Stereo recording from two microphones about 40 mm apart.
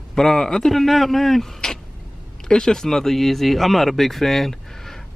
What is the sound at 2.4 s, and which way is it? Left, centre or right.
Speech, centre.